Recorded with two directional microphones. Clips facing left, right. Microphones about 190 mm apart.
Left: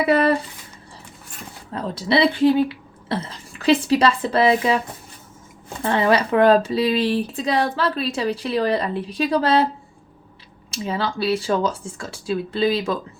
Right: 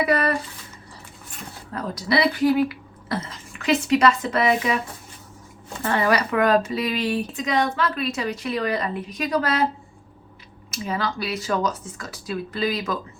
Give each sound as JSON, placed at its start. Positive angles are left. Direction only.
{"t": 0.0, "sound": "speech", "side_deg": 25}
{"t": 1.7, "sound": "speech", "side_deg": 25}
{"t": 5.8, "sound": "speech", "side_deg": 25}
{"t": 10.7, "sound": "speech", "side_deg": 30}